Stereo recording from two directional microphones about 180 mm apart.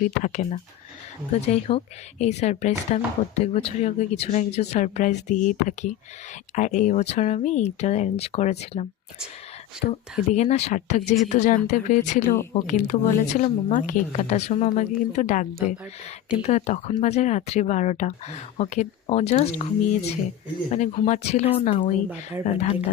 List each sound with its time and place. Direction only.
0.0 s speech: 40° left (ahead or behind)
10.2 s speech: 40° left (ahead or behind)